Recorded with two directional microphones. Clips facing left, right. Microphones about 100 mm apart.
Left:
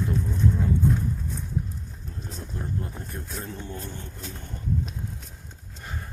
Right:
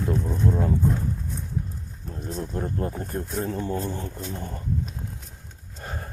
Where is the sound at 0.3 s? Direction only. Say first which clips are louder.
Right 2 dB; 45° right (ahead or behind).